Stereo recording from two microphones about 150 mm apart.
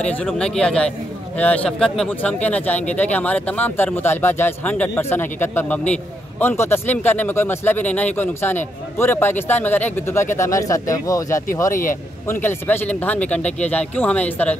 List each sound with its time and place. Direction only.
0.0 s a man's voice: 10° left (ahead or behind)
11.7 s a man's voice: 65° left (ahead or behind)
12.3 s speech: 15° left (ahead or behind)